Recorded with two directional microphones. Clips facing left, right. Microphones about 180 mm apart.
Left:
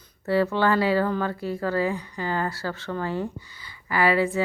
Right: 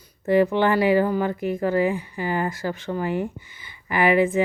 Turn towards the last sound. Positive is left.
turn(degrees=-20)  # may be behind; listen again after turning